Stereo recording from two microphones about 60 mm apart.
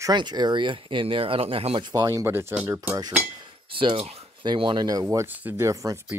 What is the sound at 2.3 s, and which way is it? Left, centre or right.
Speech, right.